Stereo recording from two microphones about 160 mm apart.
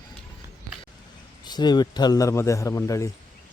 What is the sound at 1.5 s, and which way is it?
A man's voice, 25° left (ahead or behind).